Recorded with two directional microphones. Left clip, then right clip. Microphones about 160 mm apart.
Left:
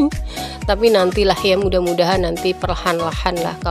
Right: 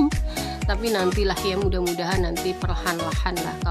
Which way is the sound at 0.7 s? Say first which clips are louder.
Left 11 dB; 45° left (ahead or behind).